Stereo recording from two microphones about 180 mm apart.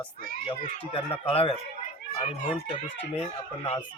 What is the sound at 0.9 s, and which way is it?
Speech, 30° left (ahead or behind).